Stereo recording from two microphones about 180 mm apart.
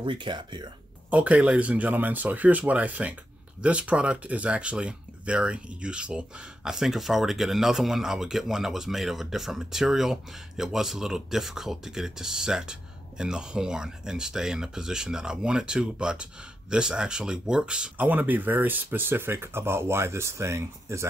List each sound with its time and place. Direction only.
0.0 s speech: 25° right (ahead or behind)
1.1 s speech: 10° right (ahead or behind)